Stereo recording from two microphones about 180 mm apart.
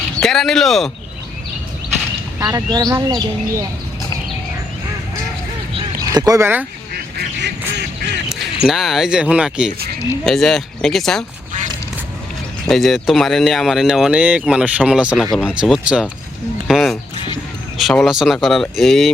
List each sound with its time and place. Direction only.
0.2 s speech: centre (ahead or behind)
2.4 s speech: 15° right (ahead or behind)
6.1 s speech: 20° right (ahead or behind)
6.9 s goose: 65° right (ahead or behind)
8.6 s speech: centre (ahead or behind)
12.6 s speech: centre (ahead or behind)
16.6 s a sound: centre (ahead or behind)
17.7 s speech: centre (ahead or behind)